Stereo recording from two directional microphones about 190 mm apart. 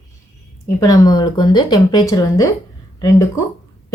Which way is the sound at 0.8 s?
20° left (ahead or behind).